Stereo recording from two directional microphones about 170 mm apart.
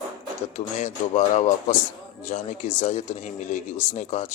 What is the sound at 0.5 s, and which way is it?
A man's voice, 45° left (ahead or behind).